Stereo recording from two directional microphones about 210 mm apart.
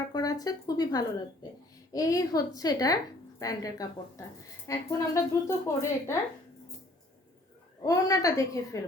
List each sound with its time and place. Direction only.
0.1 s a woman's voice: 15° left (ahead or behind)
7.9 s a woman's voice: 15° left (ahead or behind)